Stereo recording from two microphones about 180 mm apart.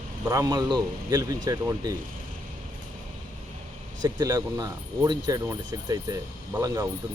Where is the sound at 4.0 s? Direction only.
20° right (ahead or behind).